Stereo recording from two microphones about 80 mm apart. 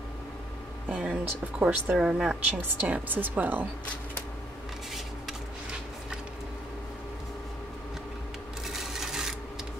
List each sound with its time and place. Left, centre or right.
0.8 s speech: centre
2.5 s speech: right
8.6 s a sound: centre